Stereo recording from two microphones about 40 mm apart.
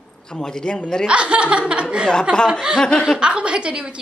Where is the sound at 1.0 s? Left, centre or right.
Right.